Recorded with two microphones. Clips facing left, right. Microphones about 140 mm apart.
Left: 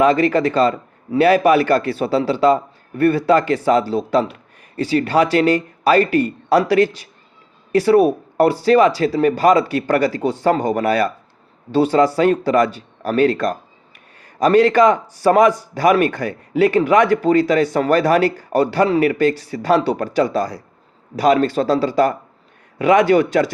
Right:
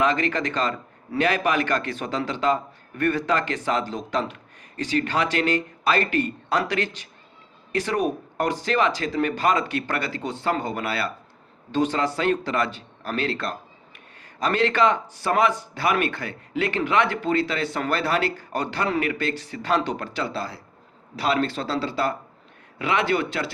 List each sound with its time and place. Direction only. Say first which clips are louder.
0.0 s a man's voice: left 8 dB; 35° left (ahead or behind)